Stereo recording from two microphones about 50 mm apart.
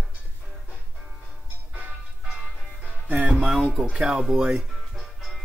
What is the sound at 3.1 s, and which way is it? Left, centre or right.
Music, right.